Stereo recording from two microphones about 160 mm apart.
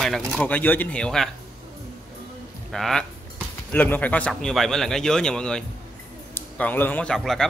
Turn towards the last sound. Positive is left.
turn(degrees=0)  # may be behind; listen again after turning